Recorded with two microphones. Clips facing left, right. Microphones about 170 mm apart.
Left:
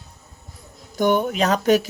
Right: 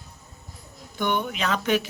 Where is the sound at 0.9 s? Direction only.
40° left (ahead or behind).